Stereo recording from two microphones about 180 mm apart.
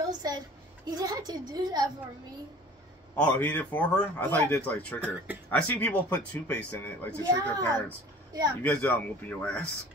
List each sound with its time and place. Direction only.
0.1 s a sound: 25° right (ahead or behind)
0.8 s a woman's voice: 20° right (ahead or behind)
3.2 s a man's voice: 10° left (ahead or behind)
5.0 s speech: 5° right (ahead or behind)
5.5 s a man's voice: 10° left (ahead or behind)
8.3 s speech: 20° right (ahead or behind)
8.6 s a man's voice: 10° left (ahead or behind)